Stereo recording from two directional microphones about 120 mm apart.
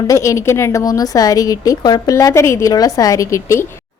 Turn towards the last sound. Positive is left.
turn(degrees=25)  # may be behind; listen again after turning